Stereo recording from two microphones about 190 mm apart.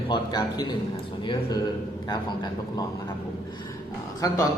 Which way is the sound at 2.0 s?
20° left (ahead or behind).